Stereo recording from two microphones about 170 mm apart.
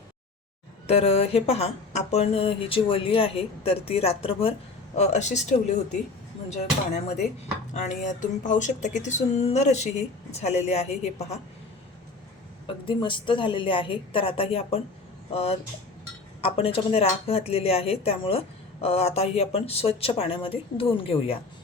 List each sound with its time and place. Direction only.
0.9 s speech: 35° left (ahead or behind)
4.9 s a sound: 40° left (ahead or behind)
10.3 s speech: 40° left (ahead or behind)
12.6 s speech: 30° left (ahead or behind)